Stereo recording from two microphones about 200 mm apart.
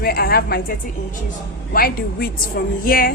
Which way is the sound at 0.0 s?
50° left (ahead or behind).